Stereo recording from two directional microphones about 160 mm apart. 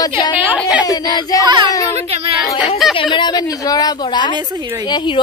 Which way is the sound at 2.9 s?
30° left (ahead or behind).